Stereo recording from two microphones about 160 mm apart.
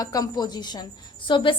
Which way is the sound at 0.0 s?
25° left (ahead or behind).